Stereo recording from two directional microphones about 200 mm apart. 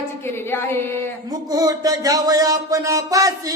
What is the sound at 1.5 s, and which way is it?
Speech, 20° right (ahead or behind).